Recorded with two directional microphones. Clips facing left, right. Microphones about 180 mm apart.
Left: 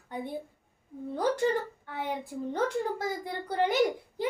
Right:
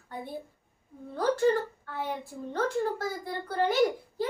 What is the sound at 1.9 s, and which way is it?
A child's voice, 15° left (ahead or behind).